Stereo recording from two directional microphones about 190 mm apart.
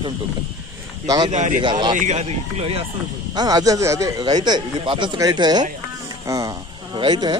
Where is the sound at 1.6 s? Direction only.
25° right (ahead or behind).